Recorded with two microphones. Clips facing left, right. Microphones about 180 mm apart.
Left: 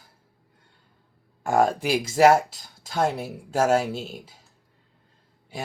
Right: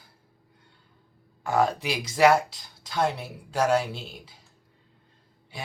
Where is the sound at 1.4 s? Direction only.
45° left (ahead or behind).